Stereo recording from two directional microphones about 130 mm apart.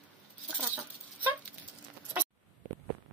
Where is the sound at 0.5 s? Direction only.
15° right (ahead or behind).